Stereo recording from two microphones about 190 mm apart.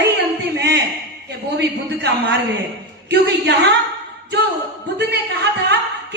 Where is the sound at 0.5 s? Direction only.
65° right (ahead or behind).